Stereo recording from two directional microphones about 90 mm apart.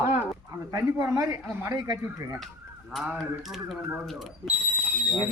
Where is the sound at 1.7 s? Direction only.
45° right (ahead or behind).